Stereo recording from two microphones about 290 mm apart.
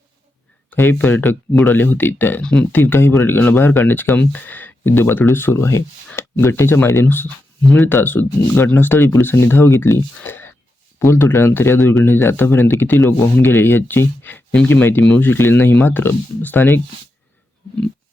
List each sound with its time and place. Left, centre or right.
0.7 s speech: centre